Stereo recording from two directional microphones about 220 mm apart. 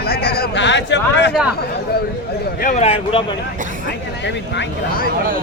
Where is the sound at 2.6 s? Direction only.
30° left (ahead or behind).